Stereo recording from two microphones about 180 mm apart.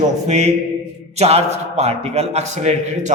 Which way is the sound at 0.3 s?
40° right (ahead or behind).